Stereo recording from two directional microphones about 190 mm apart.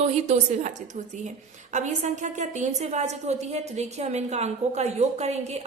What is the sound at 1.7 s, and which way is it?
A woman's voice, 40° right (ahead or behind).